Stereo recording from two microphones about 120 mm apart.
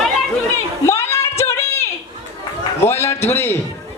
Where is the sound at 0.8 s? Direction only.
20° left (ahead or behind).